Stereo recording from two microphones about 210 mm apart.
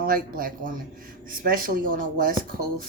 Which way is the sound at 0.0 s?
45° right (ahead or behind).